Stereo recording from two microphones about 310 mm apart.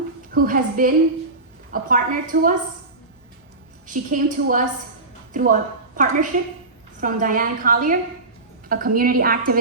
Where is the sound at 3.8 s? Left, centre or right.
Right.